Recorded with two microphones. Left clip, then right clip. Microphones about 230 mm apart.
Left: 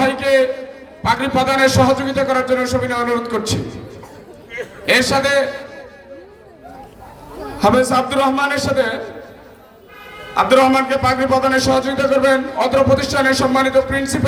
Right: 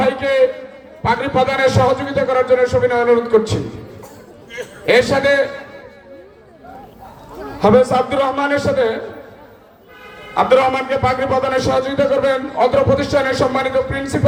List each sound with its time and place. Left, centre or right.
0.0 s a sound: left
1.0 s a man's voice: left
4.5 s a sound: right
4.9 s a man's voice: left
7.6 s a man's voice: left
10.3 s a man's voice: left